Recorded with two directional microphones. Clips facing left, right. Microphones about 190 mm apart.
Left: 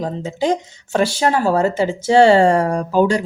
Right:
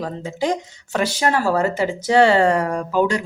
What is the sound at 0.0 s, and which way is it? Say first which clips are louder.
Speech: left 3 dB; 25° left (ahead or behind).